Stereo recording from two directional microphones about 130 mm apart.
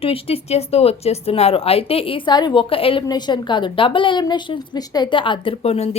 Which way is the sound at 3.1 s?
35° left (ahead or behind).